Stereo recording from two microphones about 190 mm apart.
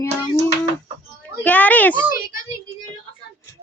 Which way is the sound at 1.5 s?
10° left (ahead or behind).